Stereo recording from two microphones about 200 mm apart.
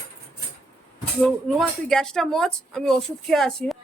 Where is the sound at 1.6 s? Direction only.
5° left (ahead or behind).